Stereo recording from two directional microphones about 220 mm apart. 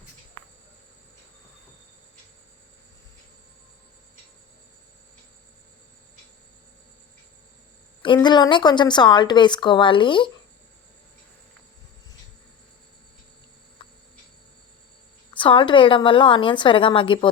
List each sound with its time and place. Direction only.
8.0 s a woman's voice: 20° left (ahead or behind)
15.3 s a woman's voice: 25° left (ahead or behind)